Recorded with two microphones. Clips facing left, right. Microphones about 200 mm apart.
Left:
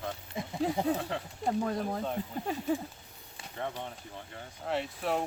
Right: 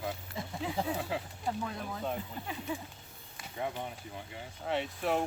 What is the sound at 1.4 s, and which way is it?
Speech, 45° left (ahead or behind).